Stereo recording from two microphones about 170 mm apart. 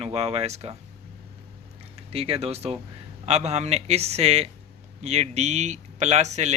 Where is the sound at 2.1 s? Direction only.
35° right (ahead or behind).